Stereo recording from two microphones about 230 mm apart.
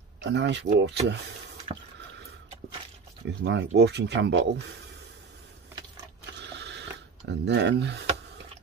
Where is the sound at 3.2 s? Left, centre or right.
Right.